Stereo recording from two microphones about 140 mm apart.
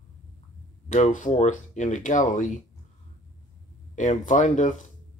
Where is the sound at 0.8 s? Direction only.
60° left (ahead or behind).